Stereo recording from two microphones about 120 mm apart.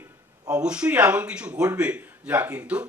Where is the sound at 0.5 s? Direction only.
10° right (ahead or behind).